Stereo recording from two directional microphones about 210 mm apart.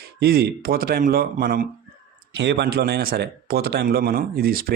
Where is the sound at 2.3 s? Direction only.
55° right (ahead or behind).